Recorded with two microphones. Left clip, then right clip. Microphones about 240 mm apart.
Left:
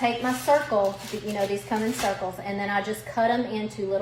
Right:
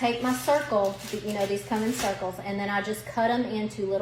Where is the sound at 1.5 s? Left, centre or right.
Centre.